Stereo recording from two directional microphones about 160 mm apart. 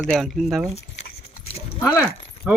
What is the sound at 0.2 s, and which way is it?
Speech, centre (ahead or behind).